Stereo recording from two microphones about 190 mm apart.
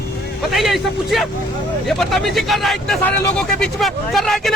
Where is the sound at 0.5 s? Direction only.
Centre (ahead or behind).